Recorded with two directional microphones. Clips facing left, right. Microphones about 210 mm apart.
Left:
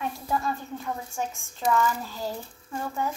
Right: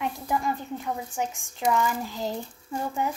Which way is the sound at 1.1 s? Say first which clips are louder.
Right 2 dB; 15° right (ahead or behind).